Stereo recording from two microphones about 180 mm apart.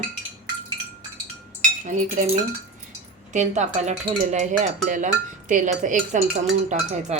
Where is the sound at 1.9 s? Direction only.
40° right (ahead or behind).